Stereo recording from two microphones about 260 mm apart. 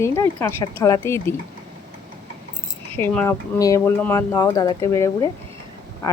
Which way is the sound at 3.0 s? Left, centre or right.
Centre.